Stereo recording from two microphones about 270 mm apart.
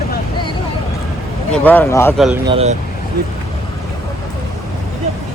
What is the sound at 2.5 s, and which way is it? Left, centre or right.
Speech, right.